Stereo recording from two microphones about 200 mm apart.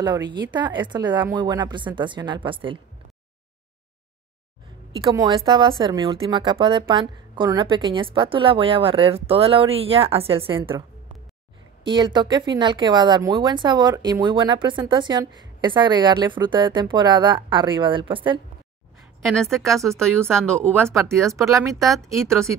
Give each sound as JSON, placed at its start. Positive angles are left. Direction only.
{"t": 0.3, "sound": "a woman's voice", "side_deg": -20}
{"t": 4.9, "sound": "a woman's voice", "side_deg": -20}
{"t": 11.8, "sound": "a woman's voice", "side_deg": -25}
{"t": 19.2, "sound": "speech", "side_deg": 0}
{"t": 20.4, "sound": "speech", "side_deg": -10}
{"t": 21.6, "sound": "speech", "side_deg": 0}